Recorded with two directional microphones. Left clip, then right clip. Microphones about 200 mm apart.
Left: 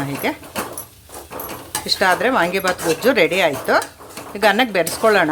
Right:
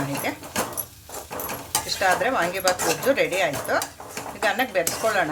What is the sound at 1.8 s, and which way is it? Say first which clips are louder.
Speech: left 6 dB; 55° left (ahead or behind).